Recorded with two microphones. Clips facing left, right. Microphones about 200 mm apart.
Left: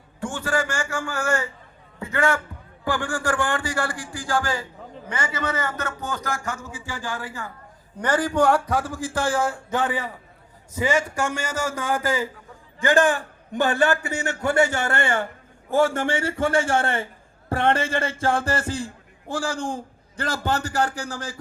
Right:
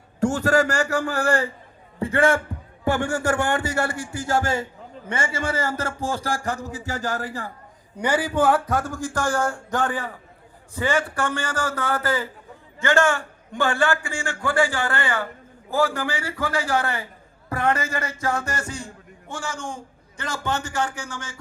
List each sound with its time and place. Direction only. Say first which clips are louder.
0.2 s a man's voice: right 6 dB; 40° right (ahead or behind)
7.9 s a man's voice: left 1 dB; 10° right (ahead or behind); by 21.3 s 35° left (ahead or behind)